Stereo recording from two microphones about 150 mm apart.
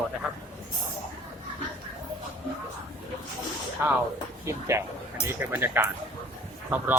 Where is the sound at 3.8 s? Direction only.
15° right (ahead or behind).